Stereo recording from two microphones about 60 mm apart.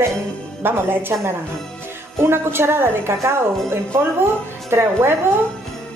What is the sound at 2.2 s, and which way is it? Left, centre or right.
A woman's voice, right.